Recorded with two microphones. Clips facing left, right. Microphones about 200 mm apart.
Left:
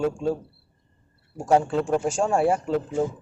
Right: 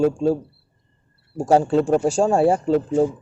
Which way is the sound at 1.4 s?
35° right (ahead or behind).